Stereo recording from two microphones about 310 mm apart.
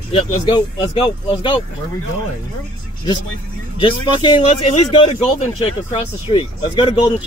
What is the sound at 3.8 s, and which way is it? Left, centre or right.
Speech, centre.